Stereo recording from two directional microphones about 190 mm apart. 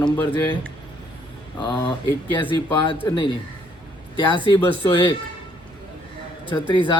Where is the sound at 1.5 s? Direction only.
25° left (ahead or behind).